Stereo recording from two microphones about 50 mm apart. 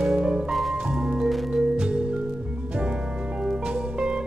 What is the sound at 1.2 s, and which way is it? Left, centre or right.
Music, centre.